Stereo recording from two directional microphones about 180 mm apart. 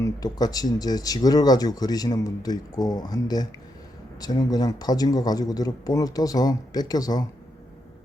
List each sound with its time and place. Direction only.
0.0 s speech: 20° left (ahead or behind)